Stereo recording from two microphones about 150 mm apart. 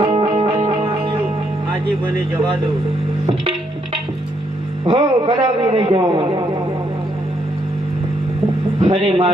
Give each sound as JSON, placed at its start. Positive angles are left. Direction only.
{"t": 0.0, "sound": "music", "side_deg": -35}
{"t": 4.9, "sound": "a man's voice", "side_deg": -35}
{"t": 8.8, "sound": "a man's voice", "side_deg": -35}